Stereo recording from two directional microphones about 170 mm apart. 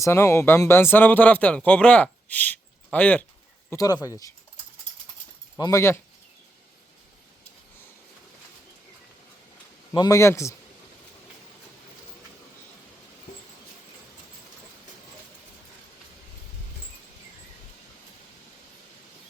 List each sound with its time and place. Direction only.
0.0 s speech: 15° left (ahead or behind)
3.7 s speech: 20° left (ahead or behind)
5.5 s speech: 20° left (ahead or behind)
9.9 s speech: 20° left (ahead or behind)